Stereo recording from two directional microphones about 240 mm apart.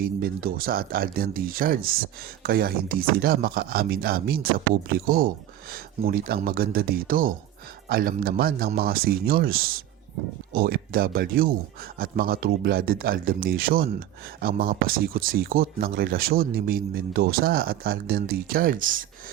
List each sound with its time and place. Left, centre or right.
0.0 s speech: right